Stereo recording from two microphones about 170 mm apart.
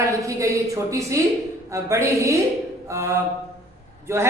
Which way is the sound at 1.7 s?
15° right (ahead or behind).